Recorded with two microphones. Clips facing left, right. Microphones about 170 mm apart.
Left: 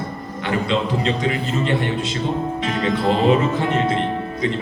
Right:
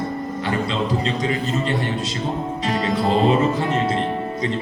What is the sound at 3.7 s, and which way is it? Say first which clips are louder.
Speech: left 1 dB; 35° right (ahead or behind).